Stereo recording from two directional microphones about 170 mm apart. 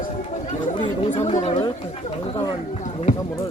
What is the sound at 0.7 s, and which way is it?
Speech, 30° left (ahead or behind).